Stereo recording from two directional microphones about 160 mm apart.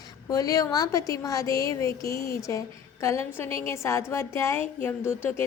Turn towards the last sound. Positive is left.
turn(degrees=15)  # may be behind; listen again after turning